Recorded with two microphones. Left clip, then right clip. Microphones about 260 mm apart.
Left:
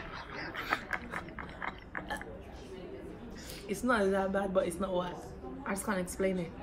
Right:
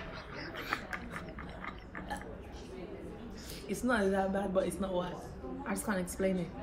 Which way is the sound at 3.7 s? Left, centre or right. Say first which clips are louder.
Left 2 dB; centre.